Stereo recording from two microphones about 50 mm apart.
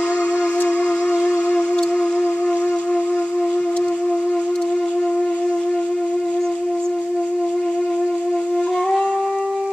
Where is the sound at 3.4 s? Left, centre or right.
Centre.